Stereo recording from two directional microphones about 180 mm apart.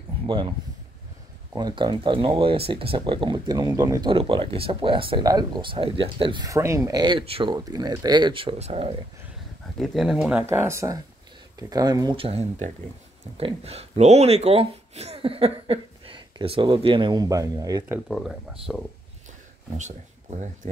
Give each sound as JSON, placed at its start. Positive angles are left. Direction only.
{"t": 0.3, "sound": "speech", "side_deg": -25}
{"t": 1.6, "sound": "speech", "side_deg": -25}
{"t": 9.8, "sound": "speech", "side_deg": 0}
{"t": 10.4, "sound": "speech", "side_deg": -15}
{"t": 18.0, "sound": "speech", "side_deg": 0}
{"t": 19.8, "sound": "speech", "side_deg": -40}